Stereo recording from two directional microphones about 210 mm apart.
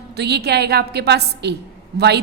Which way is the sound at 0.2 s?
50° right (ahead or behind).